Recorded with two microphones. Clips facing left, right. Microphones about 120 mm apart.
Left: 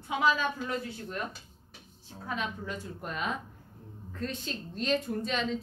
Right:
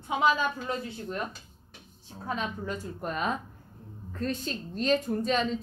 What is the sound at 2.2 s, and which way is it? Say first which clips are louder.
A woman's voice: right 3 dB; 40° right (ahead or behind).